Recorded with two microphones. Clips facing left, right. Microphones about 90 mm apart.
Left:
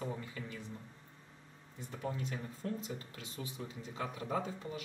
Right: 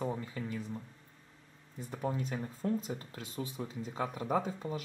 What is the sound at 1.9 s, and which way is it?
Speech, 25° right (ahead or behind).